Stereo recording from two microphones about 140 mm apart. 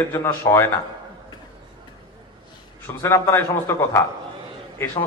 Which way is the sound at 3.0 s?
20° left (ahead or behind).